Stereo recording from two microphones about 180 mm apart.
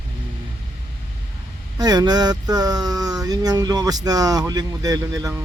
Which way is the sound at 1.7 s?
20° right (ahead or behind).